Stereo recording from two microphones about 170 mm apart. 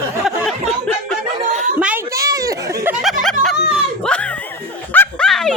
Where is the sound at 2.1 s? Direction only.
20° right (ahead or behind).